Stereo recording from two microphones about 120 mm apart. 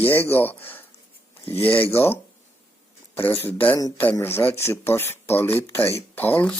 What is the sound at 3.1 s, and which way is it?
Speech, 20° left (ahead or behind).